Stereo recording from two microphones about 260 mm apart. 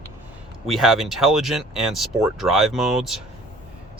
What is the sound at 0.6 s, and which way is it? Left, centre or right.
Speech, centre.